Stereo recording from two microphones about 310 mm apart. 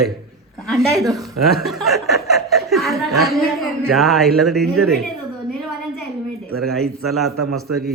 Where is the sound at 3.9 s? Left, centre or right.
Centre.